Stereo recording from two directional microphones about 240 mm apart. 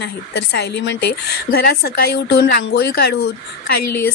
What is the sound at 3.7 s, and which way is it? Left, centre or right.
Speech, left.